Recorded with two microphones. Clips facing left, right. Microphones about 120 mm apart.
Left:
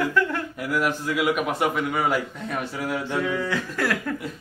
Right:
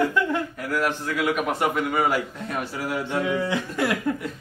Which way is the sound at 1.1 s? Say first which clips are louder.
Left 2 dB; 5° left (ahead or behind).